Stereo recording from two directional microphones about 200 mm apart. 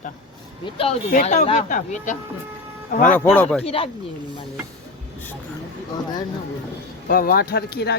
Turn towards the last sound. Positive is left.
turn(degrees=55)  # may be behind; listen again after turning